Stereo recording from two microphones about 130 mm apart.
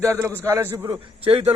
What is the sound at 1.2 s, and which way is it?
Speech, 50° right (ahead or behind).